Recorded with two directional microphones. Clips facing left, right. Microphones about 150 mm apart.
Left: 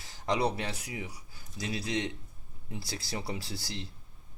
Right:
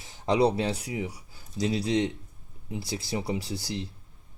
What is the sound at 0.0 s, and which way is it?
Speech, 25° right (ahead or behind).